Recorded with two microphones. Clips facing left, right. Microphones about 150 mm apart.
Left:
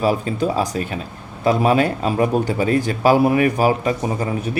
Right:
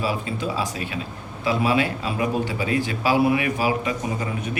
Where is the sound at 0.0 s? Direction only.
45° left (ahead or behind).